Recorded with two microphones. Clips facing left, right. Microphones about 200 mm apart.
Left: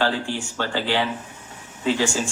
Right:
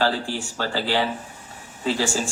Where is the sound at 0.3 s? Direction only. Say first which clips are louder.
Left 1 dB; 40° right (ahead or behind).